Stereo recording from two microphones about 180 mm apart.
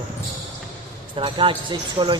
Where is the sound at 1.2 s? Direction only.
30° right (ahead or behind).